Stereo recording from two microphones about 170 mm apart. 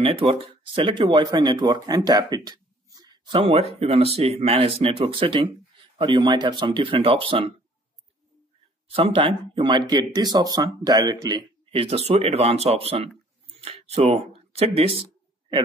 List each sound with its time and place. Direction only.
0.0 s speech: 30° right (ahead or behind)
8.8 s speech: 35° right (ahead or behind)